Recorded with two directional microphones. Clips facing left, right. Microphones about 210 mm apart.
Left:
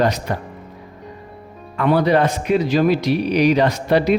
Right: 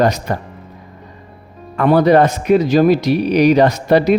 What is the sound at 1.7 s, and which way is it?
Speech, 40° right (ahead or behind).